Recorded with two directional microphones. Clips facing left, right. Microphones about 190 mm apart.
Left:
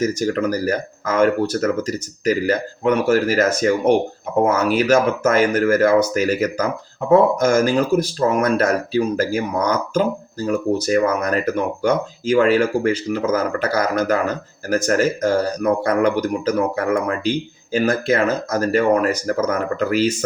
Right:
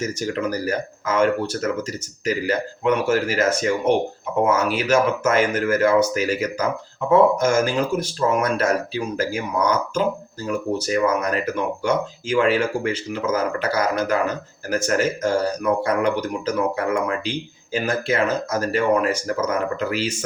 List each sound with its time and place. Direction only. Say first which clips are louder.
0.0 s speech: left 5 dB; 45° left (ahead or behind)